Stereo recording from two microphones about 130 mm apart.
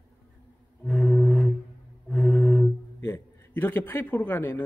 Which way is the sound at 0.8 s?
5° left (ahead or behind).